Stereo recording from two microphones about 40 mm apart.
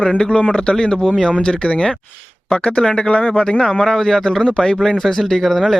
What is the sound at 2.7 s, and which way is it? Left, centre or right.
Speech, centre.